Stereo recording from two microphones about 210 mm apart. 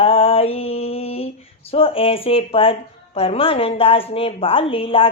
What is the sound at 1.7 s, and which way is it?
Speech, 25° left (ahead or behind).